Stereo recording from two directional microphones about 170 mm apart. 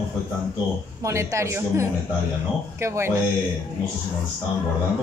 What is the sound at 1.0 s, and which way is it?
A woman's voice, 15° right (ahead or behind).